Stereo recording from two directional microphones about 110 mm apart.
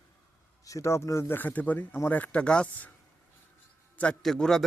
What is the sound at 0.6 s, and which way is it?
Speech, 30° left (ahead or behind).